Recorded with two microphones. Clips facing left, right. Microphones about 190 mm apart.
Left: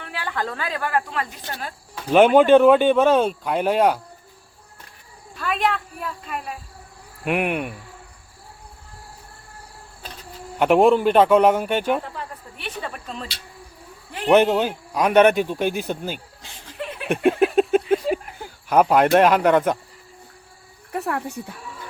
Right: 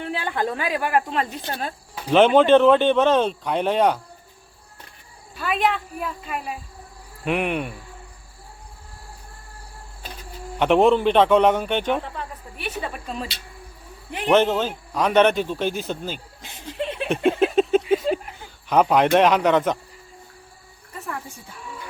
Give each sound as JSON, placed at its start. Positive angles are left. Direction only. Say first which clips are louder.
{"t": 0.0, "sound": "a woman's voice", "louder": "right 3 dB", "side_deg": -20}
{"t": 2.1, "sound": "a man's voice", "louder": "left 1 dB", "side_deg": 10}
{"t": 5.3, "sound": "a woman's voice", "louder": "right 1 dB", "side_deg": 0}
{"t": 10.6, "sound": "a man's voice", "louder": "left 1 dB", "side_deg": 5}
{"t": 14.3, "sound": "a man's voice", "louder": "left 2 dB", "side_deg": 15}
{"t": 16.4, "sound": "a sound", "louder": "right 4 dB", "side_deg": -20}
{"t": 17.2, "sound": "a sound", "louder": "left 2 dB", "side_deg": 10}
{"t": 17.8, "sound": "a sound", "louder": "even", "side_deg": 0}
{"t": 18.7, "sound": "a man's voice", "louder": "left 1 dB", "side_deg": 5}
{"t": 20.9, "sound": "speech", "louder": "left 8 dB", "side_deg": 65}